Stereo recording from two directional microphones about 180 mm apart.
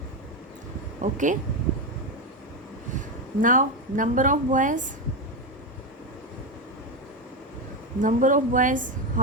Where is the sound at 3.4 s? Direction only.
45° right (ahead or behind).